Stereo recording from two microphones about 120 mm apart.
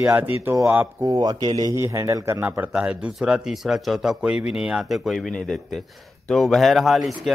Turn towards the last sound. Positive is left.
turn(degrees=0)  # may be behind; listen again after turning